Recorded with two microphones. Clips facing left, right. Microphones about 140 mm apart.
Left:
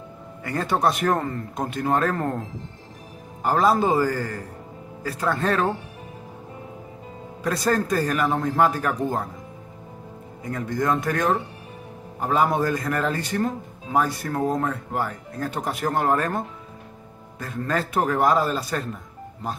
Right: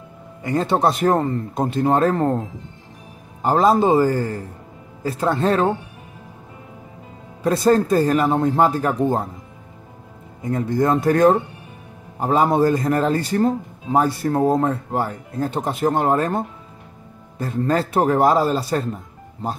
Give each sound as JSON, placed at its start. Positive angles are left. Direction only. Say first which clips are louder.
{"t": 0.4, "sound": "speech", "louder": "right 4 dB", "side_deg": -25}
{"t": 3.4, "sound": "speech", "louder": "right 4 dB", "side_deg": -25}
{"t": 7.4, "sound": "speech", "louder": "right 7 dB", "side_deg": -25}
{"t": 10.4, "sound": "speech", "louder": "right 6 dB", "side_deg": -30}